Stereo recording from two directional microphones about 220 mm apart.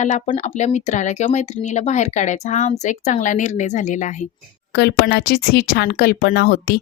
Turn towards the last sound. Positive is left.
turn(degrees=45)  # may be behind; listen again after turning